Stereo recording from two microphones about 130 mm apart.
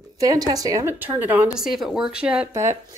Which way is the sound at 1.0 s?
15° right (ahead or behind).